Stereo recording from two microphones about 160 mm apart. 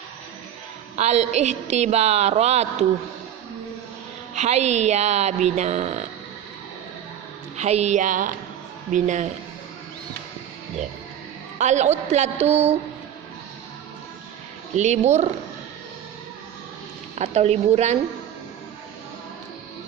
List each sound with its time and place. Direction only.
0.9 s a woman's voice: 45° right (ahead or behind)
4.4 s a woman's voice: 45° right (ahead or behind)
7.5 s a woman's voice: 45° right (ahead or behind)
11.5 s a woman's voice: 45° right (ahead or behind)
14.8 s a woman's voice: 45° right (ahead or behind)
17.2 s a woman's voice: 40° right (ahead or behind)